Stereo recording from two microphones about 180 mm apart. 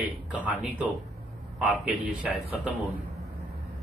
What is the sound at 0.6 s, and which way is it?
Speech, 10° right (ahead or behind).